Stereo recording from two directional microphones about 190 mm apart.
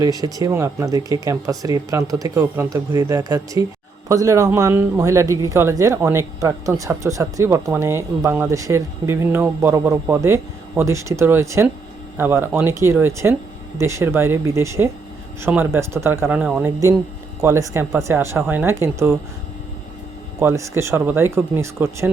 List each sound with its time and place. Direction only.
0.0 s speech: 20° right (ahead or behind)
20.4 s speech: 15° right (ahead or behind)